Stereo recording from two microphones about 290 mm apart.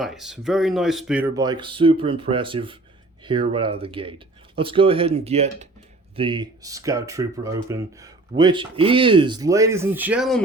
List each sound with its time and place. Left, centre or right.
0.0 s speech: centre